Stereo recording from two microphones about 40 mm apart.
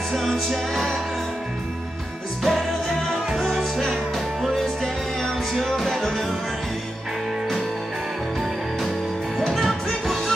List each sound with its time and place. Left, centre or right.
0.1 s music: centre
2.5 s music: centre
5.5 s music: centre
9.4 s music: centre